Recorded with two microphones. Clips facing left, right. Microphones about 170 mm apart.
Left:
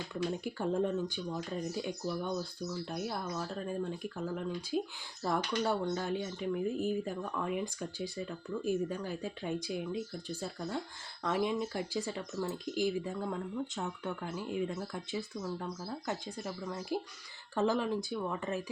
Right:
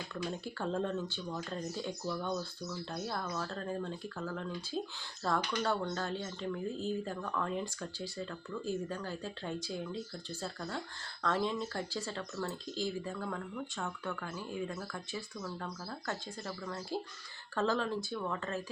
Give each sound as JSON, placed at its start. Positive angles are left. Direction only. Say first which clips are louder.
{"t": 0.1, "sound": "speech", "louder": "left 5 dB", "side_deg": 15}